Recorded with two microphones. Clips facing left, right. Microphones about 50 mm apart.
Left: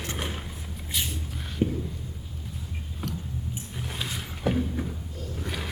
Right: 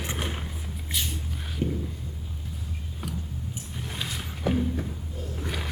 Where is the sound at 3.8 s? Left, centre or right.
Centre.